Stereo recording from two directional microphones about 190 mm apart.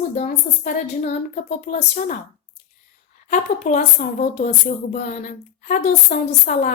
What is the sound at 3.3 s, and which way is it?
A woman's voice, 40° left (ahead or behind).